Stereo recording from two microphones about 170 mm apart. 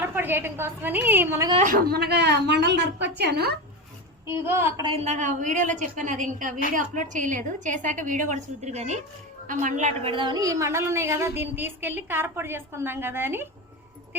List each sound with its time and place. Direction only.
0.0 s a woman's voice: 10° right (ahead or behind)
1.6 s a woman's voice: 60° right (ahead or behind); by 3.5 s 75° right (ahead or behind)
4.4 s a woman's voice: 15° right (ahead or behind)
4.8 s a woman's voice: 35° right (ahead or behind); by 13.5 s 15° right (ahead or behind)